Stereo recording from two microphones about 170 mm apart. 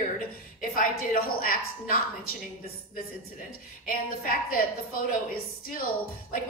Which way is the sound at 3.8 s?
55° left (ahead or behind).